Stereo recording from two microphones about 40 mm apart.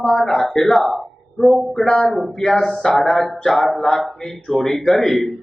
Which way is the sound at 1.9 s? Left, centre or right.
Left.